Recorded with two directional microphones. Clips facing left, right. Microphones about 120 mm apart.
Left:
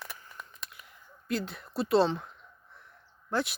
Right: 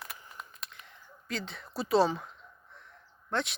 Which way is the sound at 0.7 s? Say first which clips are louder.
Right 1 dB; 5° left (ahead or behind).